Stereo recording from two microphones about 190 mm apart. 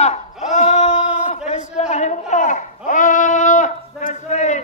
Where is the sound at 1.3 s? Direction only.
35° left (ahead or behind).